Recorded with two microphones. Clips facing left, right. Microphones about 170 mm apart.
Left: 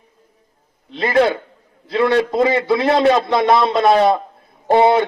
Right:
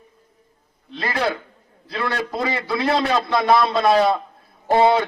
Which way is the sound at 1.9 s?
25° left (ahead or behind).